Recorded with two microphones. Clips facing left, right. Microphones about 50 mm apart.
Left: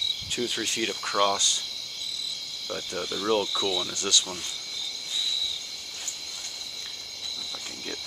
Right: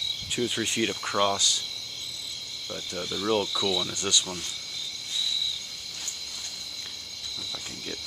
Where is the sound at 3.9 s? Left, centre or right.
Right.